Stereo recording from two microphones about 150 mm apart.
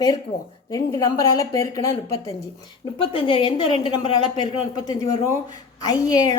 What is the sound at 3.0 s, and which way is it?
Speech, 35° left (ahead or behind).